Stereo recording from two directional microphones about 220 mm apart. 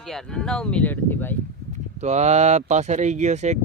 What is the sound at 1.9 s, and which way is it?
Speech, 30° right (ahead or behind).